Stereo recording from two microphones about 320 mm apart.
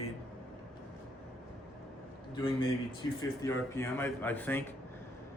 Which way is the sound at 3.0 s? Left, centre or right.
Centre.